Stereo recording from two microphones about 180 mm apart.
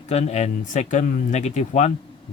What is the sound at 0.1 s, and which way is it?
Speech, 35° left (ahead or behind).